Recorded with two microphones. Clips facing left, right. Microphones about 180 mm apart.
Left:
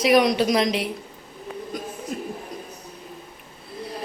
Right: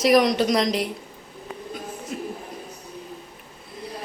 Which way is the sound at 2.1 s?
45° left (ahead or behind).